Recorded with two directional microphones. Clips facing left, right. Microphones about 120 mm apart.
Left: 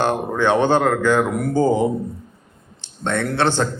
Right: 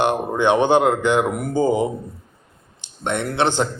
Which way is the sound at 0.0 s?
20° right (ahead or behind).